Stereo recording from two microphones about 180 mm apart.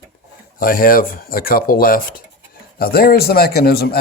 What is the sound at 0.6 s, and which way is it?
Speech, 50° left (ahead or behind).